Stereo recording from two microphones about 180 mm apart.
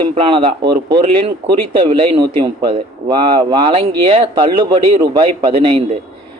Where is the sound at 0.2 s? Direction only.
30° right (ahead or behind).